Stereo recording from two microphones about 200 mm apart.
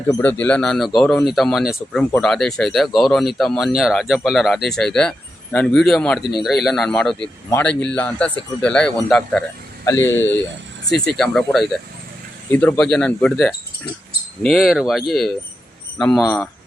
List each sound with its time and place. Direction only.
0.1 s speech: 10° left (ahead or behind)
16.2 s speech: 15° left (ahead or behind)